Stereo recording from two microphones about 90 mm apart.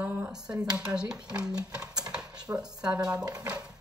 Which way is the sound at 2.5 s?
30° right (ahead or behind).